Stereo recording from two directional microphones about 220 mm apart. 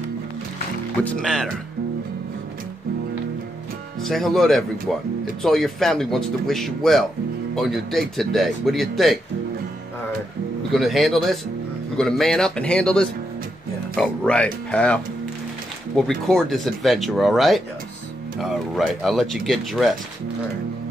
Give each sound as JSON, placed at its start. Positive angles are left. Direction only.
{"t": 1.0, "sound": "speech", "side_deg": 5}
{"t": 4.0, "sound": "speech", "side_deg": 0}
{"t": 10.7, "sound": "speech", "side_deg": 0}
{"t": 16.0, "sound": "speech", "side_deg": 0}